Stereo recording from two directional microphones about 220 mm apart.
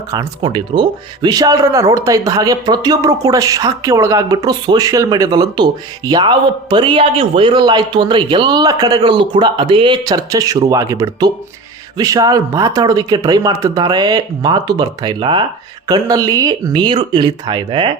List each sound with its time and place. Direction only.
0.1 s speech: 20° right (ahead or behind)